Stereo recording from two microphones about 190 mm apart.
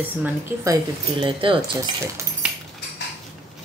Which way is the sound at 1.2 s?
25° right (ahead or behind).